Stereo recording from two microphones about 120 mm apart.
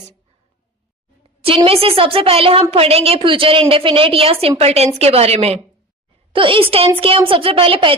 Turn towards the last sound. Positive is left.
turn(degrees=-50)  # may be behind; listen again after turning